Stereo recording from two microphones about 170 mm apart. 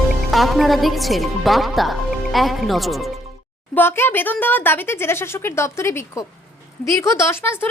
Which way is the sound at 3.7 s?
15° left (ahead or behind).